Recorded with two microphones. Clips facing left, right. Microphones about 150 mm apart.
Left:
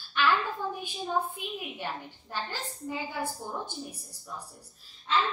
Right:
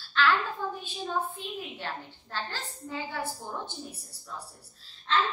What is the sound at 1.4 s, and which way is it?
A woman's voice, 15° left (ahead or behind).